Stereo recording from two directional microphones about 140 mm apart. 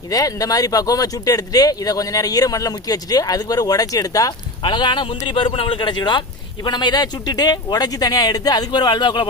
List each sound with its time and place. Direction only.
0.1 s speech: 25° left (ahead or behind)
4.6 s speech: 35° left (ahead or behind)